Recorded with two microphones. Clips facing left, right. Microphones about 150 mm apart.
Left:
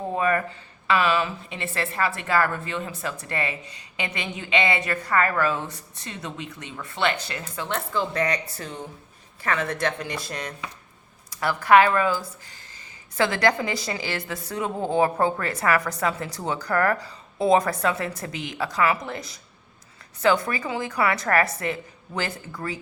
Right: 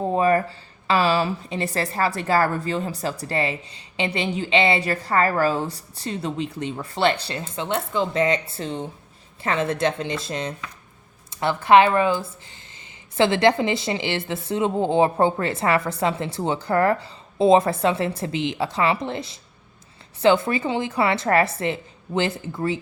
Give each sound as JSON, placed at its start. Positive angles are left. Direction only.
{"t": 0.0, "sound": "a woman's voice", "side_deg": -30}